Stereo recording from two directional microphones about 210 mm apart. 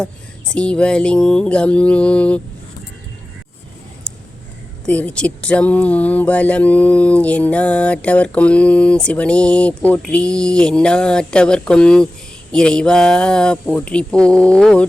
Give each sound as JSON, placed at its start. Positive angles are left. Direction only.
{"t": 0.0, "sound": "speech", "side_deg": 5}
{"t": 4.9, "sound": "speech", "side_deg": 5}